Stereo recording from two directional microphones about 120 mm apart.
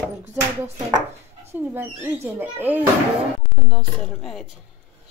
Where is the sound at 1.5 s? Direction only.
15° right (ahead or behind).